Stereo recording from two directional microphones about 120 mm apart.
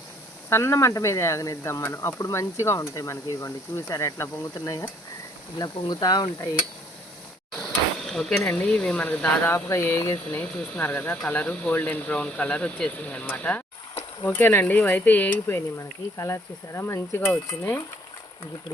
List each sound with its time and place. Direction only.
0.5 s speech: 20° left (ahead or behind)
7.5 s a sound: 5° left (ahead or behind)
8.4 s speech: 10° left (ahead or behind)
9.6 s speech: 25° left (ahead or behind)
10.4 s speech: 5° left (ahead or behind)